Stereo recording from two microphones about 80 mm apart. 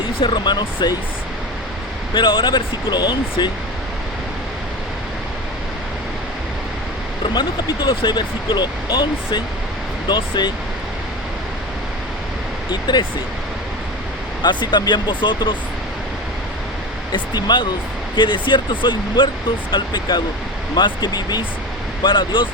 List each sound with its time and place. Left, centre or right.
0.2 s speech: left
2.1 s speech: left
7.3 s speech: left
12.7 s speech: left
14.4 s speech: left
17.1 s speech: left
18.2 s speech: left
19.7 s speech: left
22.0 s speech: left